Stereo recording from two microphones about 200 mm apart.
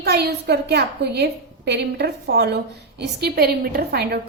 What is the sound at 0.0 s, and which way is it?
A woman's voice, 55° right (ahead or behind).